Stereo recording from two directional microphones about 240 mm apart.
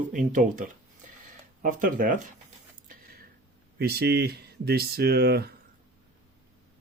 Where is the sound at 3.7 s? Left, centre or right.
Right.